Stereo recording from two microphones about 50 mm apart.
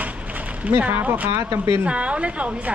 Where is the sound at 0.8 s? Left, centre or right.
Right.